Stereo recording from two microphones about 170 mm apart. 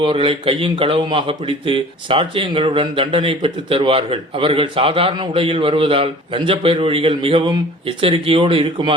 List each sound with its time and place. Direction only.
0.0 s speech: 30° right (ahead or behind)